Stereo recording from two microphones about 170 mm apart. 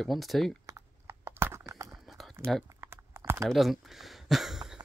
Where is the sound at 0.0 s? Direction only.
Centre (ahead or behind).